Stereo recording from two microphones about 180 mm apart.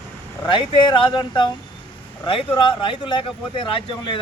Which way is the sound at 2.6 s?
30° left (ahead or behind).